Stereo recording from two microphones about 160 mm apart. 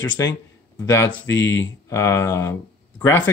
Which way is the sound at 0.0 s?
10° left (ahead or behind).